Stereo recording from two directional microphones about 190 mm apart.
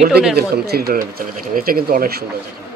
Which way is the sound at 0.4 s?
55° right (ahead or behind).